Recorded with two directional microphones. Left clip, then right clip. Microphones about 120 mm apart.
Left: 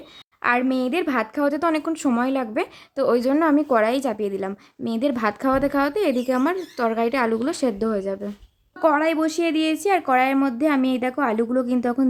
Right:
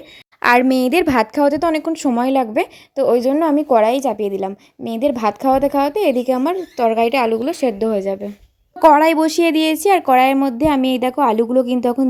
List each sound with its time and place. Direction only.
0.4 s a woman's voice: 70° right (ahead or behind); by 1.5 s 50° right (ahead or behind)
1.5 s a woman's voice: 35° right (ahead or behind)
2.9 s a sound: 20° right (ahead or behind)
3.9 s a woman's voice: 20° right (ahead or behind)
6.9 s a woman's voice: 35° left (ahead or behind)
7.7 s speech: centre (ahead or behind)
8.8 s a woman's voice: 55° right (ahead or behind); by 10.3 s 35° right (ahead or behind)
10.4 s a sound: 30° right (ahead or behind)